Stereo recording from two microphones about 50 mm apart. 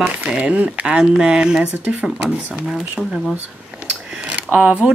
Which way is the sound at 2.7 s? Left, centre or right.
Centre.